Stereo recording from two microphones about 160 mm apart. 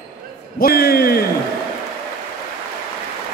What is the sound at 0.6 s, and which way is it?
Speech, 70° left (ahead or behind).